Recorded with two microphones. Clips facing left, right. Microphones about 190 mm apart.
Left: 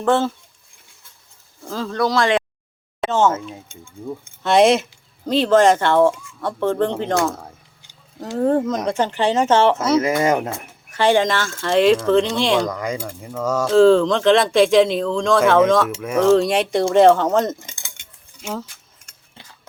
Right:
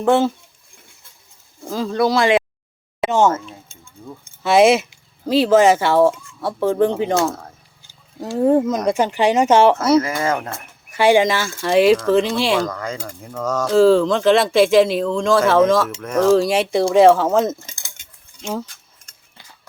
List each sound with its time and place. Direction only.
0.0 s speech: 10° right (ahead or behind)
1.6 s speech: 10° right (ahead or behind)
3.3 s speech: 10° left (ahead or behind)
4.4 s speech: 5° right (ahead or behind)
7.3 s a sound: 10° left (ahead or behind)
8.4 s speech: 10° right (ahead or behind)
10.0 s speech: 20° left (ahead or behind)
10.5 s speech: 10° right (ahead or behind)
12.6 s speech: 15° left (ahead or behind)
13.0 s speech: centre (ahead or behind)
13.7 s speech: 5° right (ahead or behind)
17.7 s keys jangling: 35° right (ahead or behind)